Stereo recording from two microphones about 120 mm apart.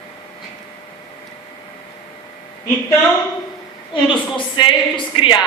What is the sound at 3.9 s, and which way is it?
A woman's voice, 40° left (ahead or behind).